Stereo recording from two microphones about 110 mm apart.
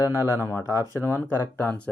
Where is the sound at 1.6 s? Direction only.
15° left (ahead or behind).